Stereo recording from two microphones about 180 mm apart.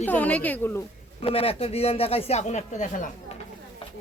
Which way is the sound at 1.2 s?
30° left (ahead or behind).